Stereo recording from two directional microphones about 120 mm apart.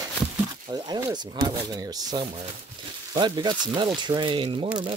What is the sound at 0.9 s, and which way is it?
Speech, 30° right (ahead or behind).